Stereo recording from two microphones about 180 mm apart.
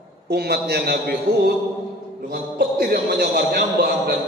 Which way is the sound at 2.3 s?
55° right (ahead or behind).